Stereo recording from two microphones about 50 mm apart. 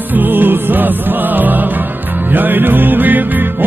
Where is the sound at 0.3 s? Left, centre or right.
Right.